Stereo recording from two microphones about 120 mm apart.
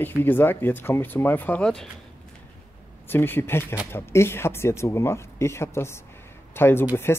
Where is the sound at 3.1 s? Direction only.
15° left (ahead or behind).